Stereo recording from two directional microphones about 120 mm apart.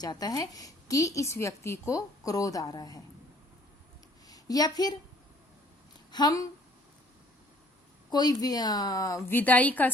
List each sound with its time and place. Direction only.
0.0 s a woman's voice: 35° left (ahead or behind)
4.3 s a woman's voice: 30° left (ahead or behind)
6.1 s speech: 35° left (ahead or behind)
8.1 s a woman's voice: 35° left (ahead or behind); by 9.9 s 15° left (ahead or behind)